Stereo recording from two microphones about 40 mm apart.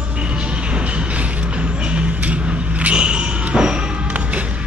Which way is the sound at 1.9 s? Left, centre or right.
Right.